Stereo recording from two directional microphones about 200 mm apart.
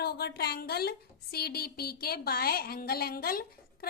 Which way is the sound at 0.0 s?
50° left (ahead or behind).